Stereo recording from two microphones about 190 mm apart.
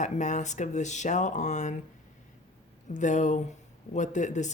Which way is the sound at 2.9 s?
40° left (ahead or behind).